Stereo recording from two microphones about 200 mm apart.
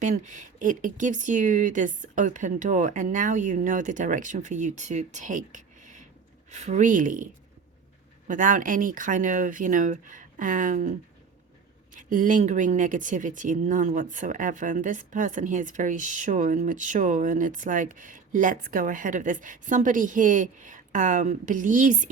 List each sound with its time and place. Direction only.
0.0 s speech: 35° right (ahead or behind)
8.3 s speech: 40° right (ahead or behind)
11.9 s speech: 40° right (ahead or behind)